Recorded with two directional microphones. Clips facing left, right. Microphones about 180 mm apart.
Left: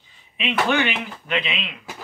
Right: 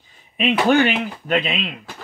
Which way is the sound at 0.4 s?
40° right (ahead or behind).